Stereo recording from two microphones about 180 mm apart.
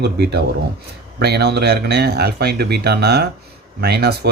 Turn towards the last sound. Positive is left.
turn(degrees=-65)  # may be behind; listen again after turning